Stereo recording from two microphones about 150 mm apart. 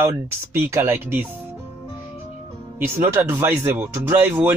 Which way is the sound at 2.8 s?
15° right (ahead or behind).